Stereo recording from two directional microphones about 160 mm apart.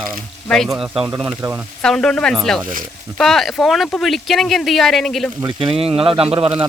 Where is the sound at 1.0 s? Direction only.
20° right (ahead or behind).